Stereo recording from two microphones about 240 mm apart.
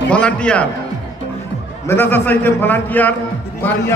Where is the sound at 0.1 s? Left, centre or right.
Centre.